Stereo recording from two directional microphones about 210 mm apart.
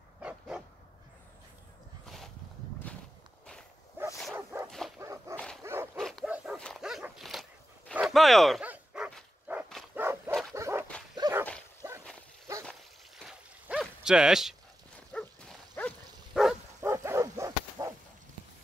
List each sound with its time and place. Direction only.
0.2 s dog: 5° right (ahead or behind)
2.0 s a sound: centre (ahead or behind)
2.8 s walk: 5° left (ahead or behind)
4.3 s dog: 10° right (ahead or behind)
4.6 s dog: centre (ahead or behind)
5.0 s dog: 15° right (ahead or behind)
5.3 s dog: 5° left (ahead or behind)
5.6 s dog: 10° right (ahead or behind)
5.9 s dog: centre (ahead or behind); by 11.4 s 20° right (ahead or behind)
13.2 s a sound: centre (ahead or behind)
15.0 s dog: 5° left (ahead or behind)
16.8 s bow-wow: 10° right (ahead or behind)